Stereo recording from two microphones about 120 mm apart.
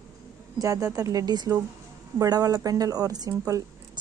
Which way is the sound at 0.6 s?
25° right (ahead or behind).